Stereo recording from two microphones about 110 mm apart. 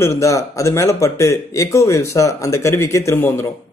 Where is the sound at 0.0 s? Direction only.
25° left (ahead or behind).